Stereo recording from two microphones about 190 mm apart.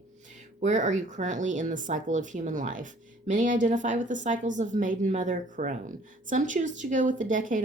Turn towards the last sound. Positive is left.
turn(degrees=-40)  # may be behind; listen again after turning